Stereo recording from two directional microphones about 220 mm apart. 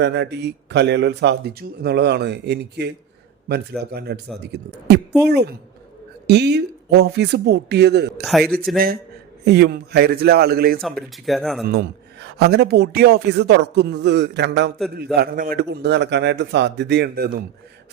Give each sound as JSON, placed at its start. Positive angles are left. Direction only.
{"t": 0.0, "sound": "a man's voice", "side_deg": -50}
{"t": 3.9, "sound": "a man's voice", "side_deg": -45}
{"t": 5.2, "sound": "a man's voice", "side_deg": -50}
{"t": 8.2, "sound": "a man's voice", "side_deg": 0}
{"t": 9.4, "sound": "a man's voice", "side_deg": -50}
{"t": 11.3, "sound": "a man's voice", "side_deg": 0}
{"t": 11.7, "sound": "a man's voice", "side_deg": -50}